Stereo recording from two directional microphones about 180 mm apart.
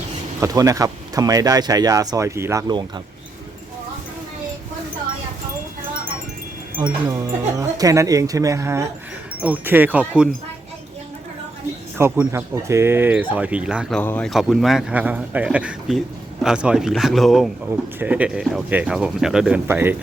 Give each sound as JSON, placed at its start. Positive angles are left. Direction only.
{"t": 0.3, "sound": "speech", "side_deg": -20}
{"t": 6.7, "sound": "speech", "side_deg": -25}
{"t": 11.9, "sound": "speech", "side_deg": -10}
{"t": 13.9, "sound": "a man's voice", "side_deg": 10}